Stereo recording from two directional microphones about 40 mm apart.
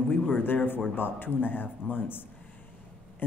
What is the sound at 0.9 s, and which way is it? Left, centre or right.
A man's voice, left.